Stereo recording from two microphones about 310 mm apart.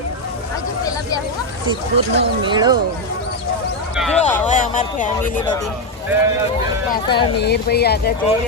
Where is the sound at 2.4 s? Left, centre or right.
Centre.